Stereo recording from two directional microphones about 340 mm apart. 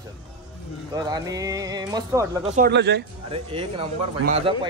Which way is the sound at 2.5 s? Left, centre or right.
Right.